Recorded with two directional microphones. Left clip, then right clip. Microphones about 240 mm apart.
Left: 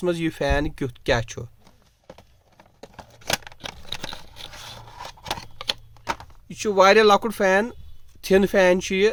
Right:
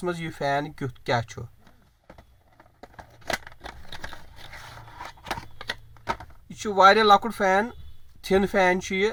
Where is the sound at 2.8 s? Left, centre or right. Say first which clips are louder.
Left 3 dB; centre.